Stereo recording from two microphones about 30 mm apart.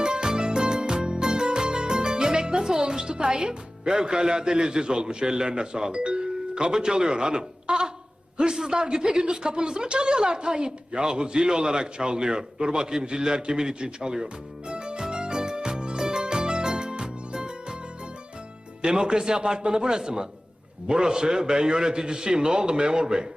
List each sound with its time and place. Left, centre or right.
0.0 s music: right
8.4 s speech: right
14.7 s music: right
18.8 s speech: right